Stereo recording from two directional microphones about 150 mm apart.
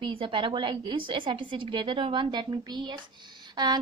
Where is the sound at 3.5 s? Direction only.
25° right (ahead or behind).